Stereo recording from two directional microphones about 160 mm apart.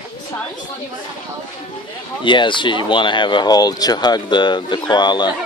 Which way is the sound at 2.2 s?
30° left (ahead or behind).